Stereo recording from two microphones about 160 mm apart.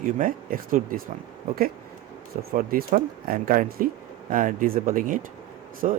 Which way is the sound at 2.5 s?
60° right (ahead or behind).